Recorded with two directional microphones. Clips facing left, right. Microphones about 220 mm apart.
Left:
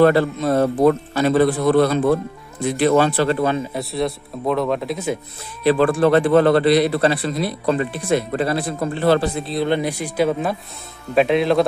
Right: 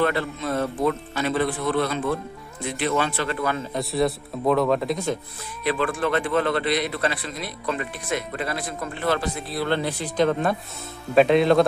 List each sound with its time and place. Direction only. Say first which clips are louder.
0.0 s a man's voice: left 9 dB; 35° left (ahead or behind)
3.7 s speech: even; centre (ahead or behind)
5.6 s a man's voice: left 9 dB; 35° left (ahead or behind); by 11.6 s centre (ahead or behind)